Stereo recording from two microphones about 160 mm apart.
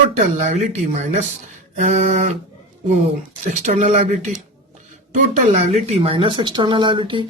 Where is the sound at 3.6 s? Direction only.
50° right (ahead or behind).